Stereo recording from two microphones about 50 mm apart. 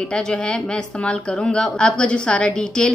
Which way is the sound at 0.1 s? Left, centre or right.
Centre.